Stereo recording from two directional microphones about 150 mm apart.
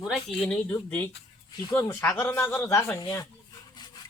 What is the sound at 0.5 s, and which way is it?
Speech, 15° left (ahead or behind).